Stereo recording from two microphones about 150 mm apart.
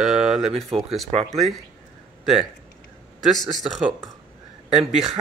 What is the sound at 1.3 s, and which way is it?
Speech, centre (ahead or behind).